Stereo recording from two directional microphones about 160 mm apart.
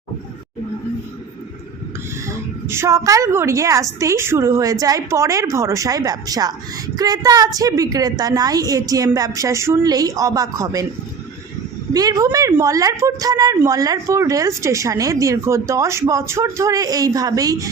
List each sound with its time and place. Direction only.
2.2 s a woman's voice: 15° right (ahead or behind)
11.9 s a woman's voice: 20° right (ahead or behind)